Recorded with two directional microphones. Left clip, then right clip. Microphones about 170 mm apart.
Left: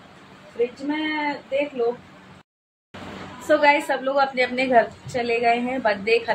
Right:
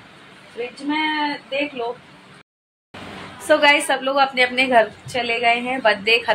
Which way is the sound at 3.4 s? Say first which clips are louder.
Right 3 dB; centre (ahead or behind).